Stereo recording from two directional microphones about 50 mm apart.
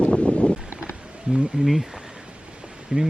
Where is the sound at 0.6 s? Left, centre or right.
Right.